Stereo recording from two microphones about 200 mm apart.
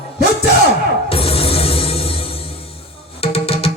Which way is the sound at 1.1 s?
30° left (ahead or behind).